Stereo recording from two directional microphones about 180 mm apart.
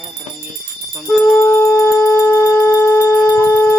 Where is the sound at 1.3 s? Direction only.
10° left (ahead or behind).